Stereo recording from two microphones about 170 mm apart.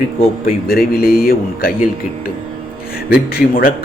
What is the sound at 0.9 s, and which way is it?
Speech, 65° left (ahead or behind).